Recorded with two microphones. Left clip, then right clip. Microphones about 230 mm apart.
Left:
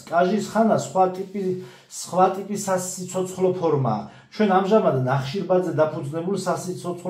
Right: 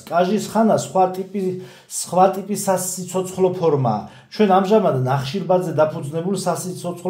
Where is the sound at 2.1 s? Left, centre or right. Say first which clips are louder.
Right 4 dB; right.